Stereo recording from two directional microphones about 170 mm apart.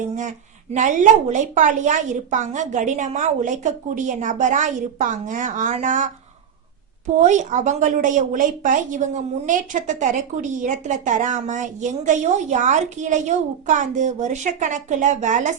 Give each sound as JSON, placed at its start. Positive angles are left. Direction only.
{"t": 0.2, "sound": "a woman's voice", "side_deg": -45}
{"t": 7.2, "sound": "a woman's voice", "side_deg": -45}